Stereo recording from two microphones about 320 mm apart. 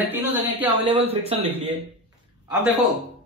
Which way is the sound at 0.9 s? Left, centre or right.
Centre.